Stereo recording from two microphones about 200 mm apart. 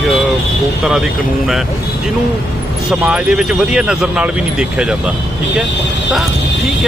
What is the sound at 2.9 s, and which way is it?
Speech, 5° right (ahead or behind).